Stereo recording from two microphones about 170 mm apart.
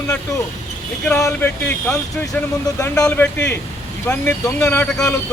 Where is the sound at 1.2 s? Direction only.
10° left (ahead or behind).